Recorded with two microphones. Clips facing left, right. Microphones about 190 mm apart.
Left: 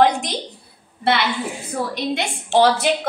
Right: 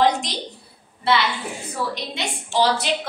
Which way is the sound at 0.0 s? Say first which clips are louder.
Left 3 dB; 50° left (ahead or behind).